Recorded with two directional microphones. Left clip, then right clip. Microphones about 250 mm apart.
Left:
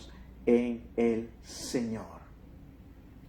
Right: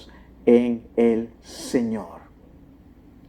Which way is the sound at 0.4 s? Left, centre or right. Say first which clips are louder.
Right 9 dB; right.